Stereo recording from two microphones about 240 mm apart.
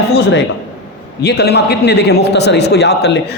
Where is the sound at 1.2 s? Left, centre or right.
Left.